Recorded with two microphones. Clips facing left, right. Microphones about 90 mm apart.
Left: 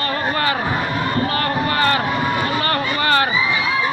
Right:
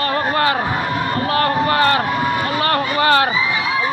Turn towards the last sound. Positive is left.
turn(degrees=-55)  # may be behind; listen again after turning